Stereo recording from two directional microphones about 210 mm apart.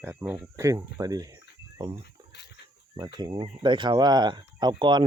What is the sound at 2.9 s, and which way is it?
Speech, 15° right (ahead or behind).